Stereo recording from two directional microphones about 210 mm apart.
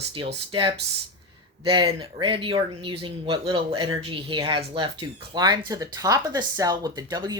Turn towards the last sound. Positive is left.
turn(degrees=-20)  # may be behind; listen again after turning